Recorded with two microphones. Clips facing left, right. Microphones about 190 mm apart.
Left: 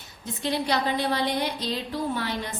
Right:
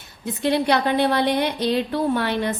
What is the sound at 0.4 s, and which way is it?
A woman's voice, 65° right (ahead or behind).